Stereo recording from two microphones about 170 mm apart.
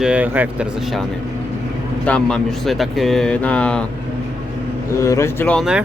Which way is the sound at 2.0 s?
5° left (ahead or behind).